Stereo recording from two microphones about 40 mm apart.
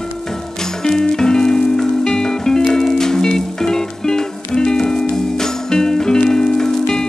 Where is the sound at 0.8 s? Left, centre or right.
Centre.